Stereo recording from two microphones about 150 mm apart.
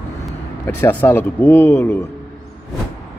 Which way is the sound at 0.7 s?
15° left (ahead or behind).